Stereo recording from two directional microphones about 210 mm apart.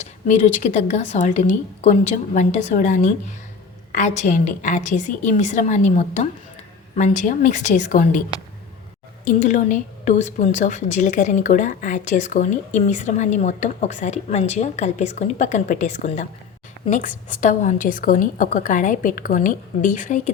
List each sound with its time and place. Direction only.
0.3 s a woman's voice: 35° left (ahead or behind)
9.2 s a woman's voice: 35° left (ahead or behind)